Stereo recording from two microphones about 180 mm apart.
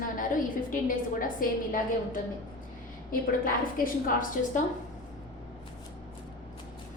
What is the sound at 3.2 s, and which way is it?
A woman's voice, 50° left (ahead or behind).